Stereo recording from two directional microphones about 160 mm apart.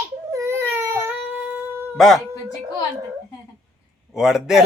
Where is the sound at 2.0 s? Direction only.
Centre (ahead or behind).